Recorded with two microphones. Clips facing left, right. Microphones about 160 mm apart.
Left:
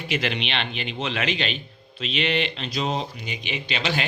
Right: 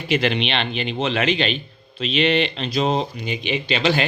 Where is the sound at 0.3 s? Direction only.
30° right (ahead or behind).